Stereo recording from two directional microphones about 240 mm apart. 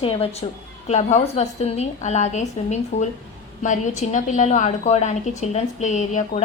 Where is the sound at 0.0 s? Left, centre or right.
Left.